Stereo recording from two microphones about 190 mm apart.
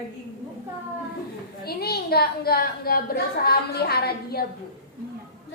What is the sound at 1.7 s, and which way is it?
A woman's voice, 55° left (ahead or behind).